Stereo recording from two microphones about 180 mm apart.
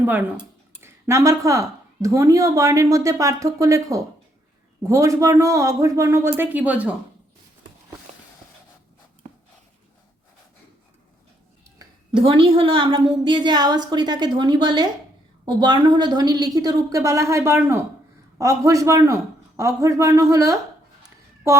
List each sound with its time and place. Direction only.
0.0 s speech: 10° right (ahead or behind)
11.8 s a woman's voice: 30° right (ahead or behind)